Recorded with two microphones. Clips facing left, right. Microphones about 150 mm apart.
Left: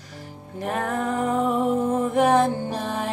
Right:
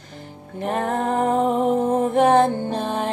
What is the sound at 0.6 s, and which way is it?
Music, 25° right (ahead or behind).